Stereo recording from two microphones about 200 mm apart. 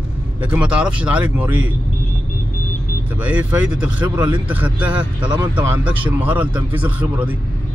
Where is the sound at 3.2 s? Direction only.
5° right (ahead or behind).